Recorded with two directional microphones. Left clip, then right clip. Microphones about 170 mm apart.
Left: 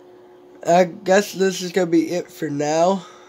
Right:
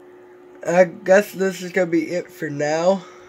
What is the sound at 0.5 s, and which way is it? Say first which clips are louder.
Speech: even; 5° left (ahead or behind).